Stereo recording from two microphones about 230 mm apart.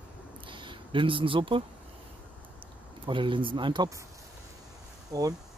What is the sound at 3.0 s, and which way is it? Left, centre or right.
Speech, right.